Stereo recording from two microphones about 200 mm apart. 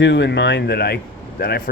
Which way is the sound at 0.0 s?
60° left (ahead or behind).